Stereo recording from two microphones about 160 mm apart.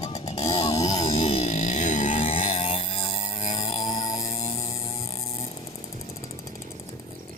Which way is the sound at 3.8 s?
25° left (ahead or behind).